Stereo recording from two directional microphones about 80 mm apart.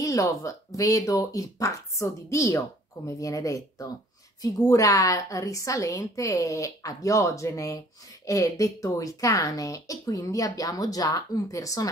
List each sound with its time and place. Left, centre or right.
0.0 s speech: left